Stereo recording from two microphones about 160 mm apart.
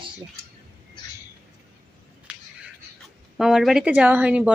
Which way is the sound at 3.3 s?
5° right (ahead or behind).